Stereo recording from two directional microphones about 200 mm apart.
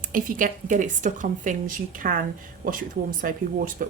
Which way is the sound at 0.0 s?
45° right (ahead or behind).